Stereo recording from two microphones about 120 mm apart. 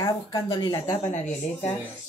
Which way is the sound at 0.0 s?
35° left (ahead or behind).